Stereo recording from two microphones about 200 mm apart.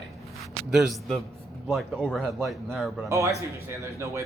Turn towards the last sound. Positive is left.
turn(degrees=-15)  # may be behind; listen again after turning